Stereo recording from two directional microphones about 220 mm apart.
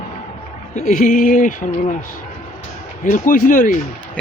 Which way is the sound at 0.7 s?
35° left (ahead or behind).